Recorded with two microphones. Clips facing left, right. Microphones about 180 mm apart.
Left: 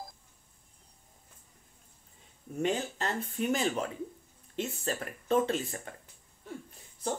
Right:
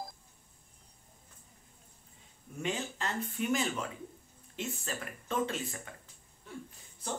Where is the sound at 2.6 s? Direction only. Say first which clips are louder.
Left 5 dB; 40° left (ahead or behind).